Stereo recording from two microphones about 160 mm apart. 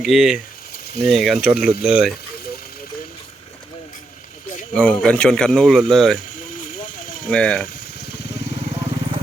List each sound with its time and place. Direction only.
0.0 s speech: centre (ahead or behind)
4.7 s speech: 5° left (ahead or behind)
6.6 s vehicle: 55° left (ahead or behind)
7.3 s speech: 5° left (ahead or behind)